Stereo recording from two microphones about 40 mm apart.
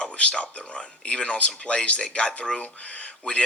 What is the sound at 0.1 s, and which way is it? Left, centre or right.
Speech, left.